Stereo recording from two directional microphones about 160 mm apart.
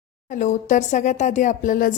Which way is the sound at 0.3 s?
50° left (ahead or behind).